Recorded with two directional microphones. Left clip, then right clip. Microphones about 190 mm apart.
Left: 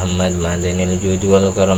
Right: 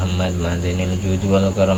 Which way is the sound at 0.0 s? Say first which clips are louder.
Left 4 dB; 35° left (ahead or behind).